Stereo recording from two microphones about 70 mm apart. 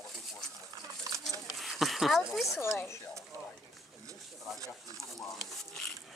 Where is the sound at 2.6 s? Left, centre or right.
Left.